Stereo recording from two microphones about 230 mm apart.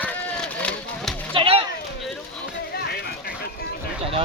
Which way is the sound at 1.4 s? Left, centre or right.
Right.